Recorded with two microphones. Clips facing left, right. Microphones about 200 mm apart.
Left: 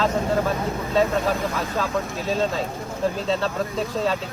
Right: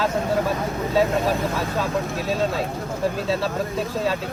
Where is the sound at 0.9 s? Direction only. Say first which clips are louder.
Right 1 dB; centre (ahead or behind).